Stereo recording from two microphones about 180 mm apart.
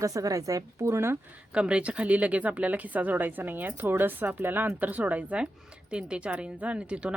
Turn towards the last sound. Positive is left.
turn(degrees=-5)  # may be behind; listen again after turning